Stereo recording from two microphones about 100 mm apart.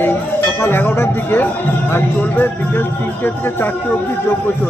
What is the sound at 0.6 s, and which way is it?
Speech, 20° left (ahead or behind).